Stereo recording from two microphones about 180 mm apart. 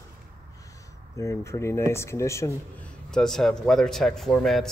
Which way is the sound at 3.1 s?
Centre (ahead or behind).